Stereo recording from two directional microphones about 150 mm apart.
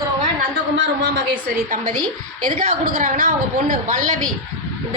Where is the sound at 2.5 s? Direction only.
60° right (ahead or behind).